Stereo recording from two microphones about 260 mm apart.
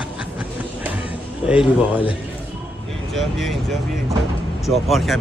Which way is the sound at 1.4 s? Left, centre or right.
Centre.